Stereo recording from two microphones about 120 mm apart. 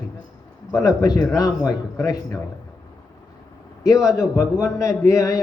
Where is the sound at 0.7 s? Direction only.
30° left (ahead or behind).